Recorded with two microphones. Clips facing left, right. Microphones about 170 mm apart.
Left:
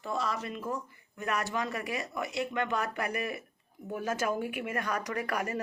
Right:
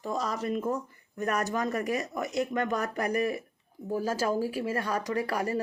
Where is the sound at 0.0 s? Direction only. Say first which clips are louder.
Right 2 dB; 40° right (ahead or behind).